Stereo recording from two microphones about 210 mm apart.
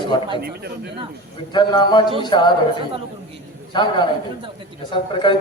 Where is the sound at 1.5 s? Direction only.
20° left (ahead or behind).